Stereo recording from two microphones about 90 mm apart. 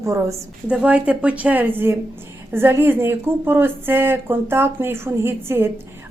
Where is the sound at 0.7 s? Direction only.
15° right (ahead or behind).